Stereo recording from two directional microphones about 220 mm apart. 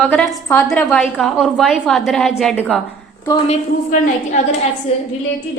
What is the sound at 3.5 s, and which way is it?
Speech, 35° left (ahead or behind).